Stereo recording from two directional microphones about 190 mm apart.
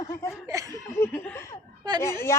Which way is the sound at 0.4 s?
15° right (ahead or behind).